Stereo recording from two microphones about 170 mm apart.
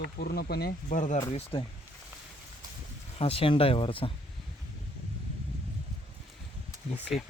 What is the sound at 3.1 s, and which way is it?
Speech, 35° left (ahead or behind).